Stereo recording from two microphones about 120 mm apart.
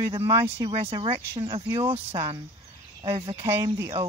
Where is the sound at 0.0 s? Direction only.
30° right (ahead or behind).